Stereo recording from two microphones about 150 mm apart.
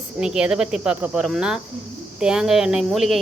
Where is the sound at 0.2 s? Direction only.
5° right (ahead or behind).